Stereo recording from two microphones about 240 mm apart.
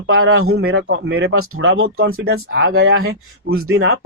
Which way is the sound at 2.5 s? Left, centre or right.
Right.